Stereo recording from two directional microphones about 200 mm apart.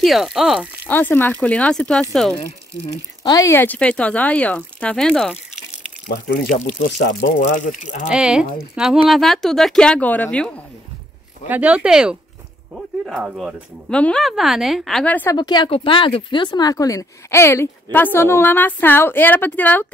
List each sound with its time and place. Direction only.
0.0 s speech: centre (ahead or behind)
0.8 s speech: 10° left (ahead or behind)
2.9 s speech: 15° left (ahead or behind)
6.0 s speech: 55° left (ahead or behind)
7.1 s speech: 55° left (ahead or behind)
7.5 s cattle: 40° left (ahead or behind)
8.1 s speech: 5° right (ahead or behind)
11.4 s speech: 10° right (ahead or behind); by 15.3 s 10° left (ahead or behind)
15.3 s speech: 20° left (ahead or behind)